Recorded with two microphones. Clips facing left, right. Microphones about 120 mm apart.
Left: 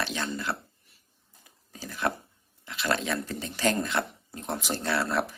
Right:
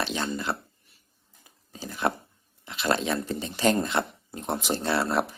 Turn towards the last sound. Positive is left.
turn(degrees=-25)  # may be behind; listen again after turning